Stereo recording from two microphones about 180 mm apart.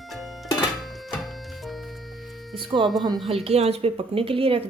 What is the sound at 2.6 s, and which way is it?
A woman's voice, 25° right (ahead or behind).